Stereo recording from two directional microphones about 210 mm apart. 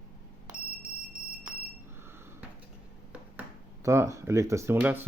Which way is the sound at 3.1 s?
10° right (ahead or behind).